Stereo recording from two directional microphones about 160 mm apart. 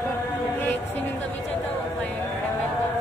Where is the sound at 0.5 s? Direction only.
10° left (ahead or behind).